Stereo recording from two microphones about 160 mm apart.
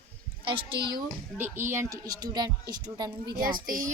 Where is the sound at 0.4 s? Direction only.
30° right (ahead or behind).